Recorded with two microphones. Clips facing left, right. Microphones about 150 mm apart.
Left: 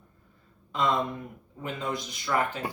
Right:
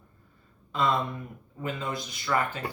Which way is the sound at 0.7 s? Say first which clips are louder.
Even; 15° left (ahead or behind).